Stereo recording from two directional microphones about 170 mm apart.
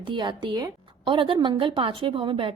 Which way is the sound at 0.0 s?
30° right (ahead or behind).